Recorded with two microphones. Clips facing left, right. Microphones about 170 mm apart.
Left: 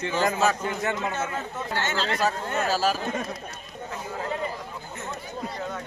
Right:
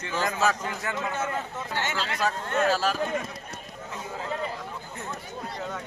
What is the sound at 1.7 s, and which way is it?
Speech, 10° right (ahead or behind).